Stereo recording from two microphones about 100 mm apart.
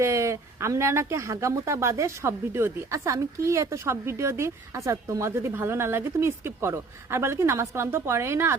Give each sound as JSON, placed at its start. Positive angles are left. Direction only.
{"t": 0.0, "sound": "speech", "side_deg": -30}